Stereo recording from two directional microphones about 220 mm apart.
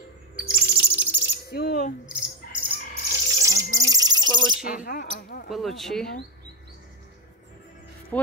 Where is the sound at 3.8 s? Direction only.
15° right (ahead or behind).